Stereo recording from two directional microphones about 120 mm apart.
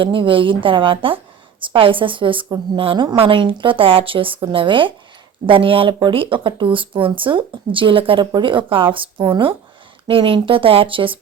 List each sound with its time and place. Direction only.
0.0 s speech: 45° right (ahead or behind)